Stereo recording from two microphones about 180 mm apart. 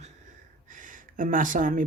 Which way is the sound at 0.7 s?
45° right (ahead or behind).